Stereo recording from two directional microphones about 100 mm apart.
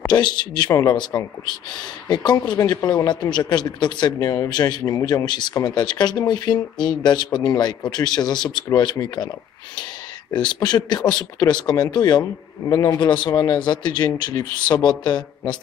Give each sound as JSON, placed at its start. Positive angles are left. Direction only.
{"t": 0.1, "sound": "speech", "side_deg": 45}
{"t": 10.3, "sound": "speech", "side_deg": 45}
{"t": 13.0, "sound": "speech", "side_deg": 50}
{"t": 13.3, "sound": "speech", "side_deg": 40}